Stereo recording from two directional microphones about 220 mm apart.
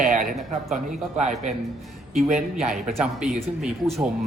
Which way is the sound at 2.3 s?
Centre (ahead or behind).